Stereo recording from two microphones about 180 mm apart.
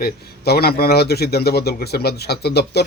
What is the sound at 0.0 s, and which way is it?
Speech, 60° left (ahead or behind).